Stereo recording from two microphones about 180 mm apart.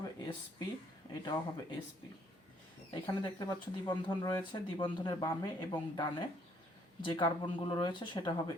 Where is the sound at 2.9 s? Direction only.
20° left (ahead or behind).